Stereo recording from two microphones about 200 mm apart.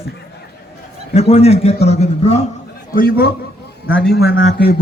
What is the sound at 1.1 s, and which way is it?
A man's voice, 30° left (ahead or behind).